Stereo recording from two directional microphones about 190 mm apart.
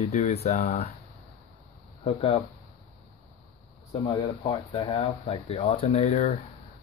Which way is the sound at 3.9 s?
35° left (ahead or behind).